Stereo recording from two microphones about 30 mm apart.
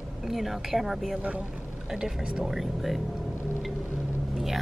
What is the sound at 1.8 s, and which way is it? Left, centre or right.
Speech, centre.